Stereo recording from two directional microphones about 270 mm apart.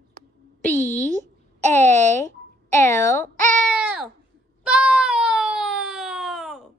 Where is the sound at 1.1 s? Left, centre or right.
Right.